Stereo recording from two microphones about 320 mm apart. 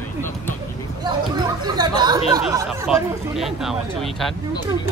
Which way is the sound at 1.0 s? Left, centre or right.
Centre.